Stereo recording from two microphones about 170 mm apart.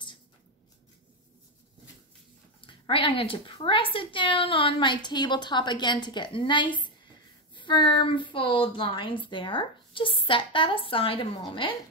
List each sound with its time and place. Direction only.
2.6 s a woman's voice: 30° left (ahead or behind)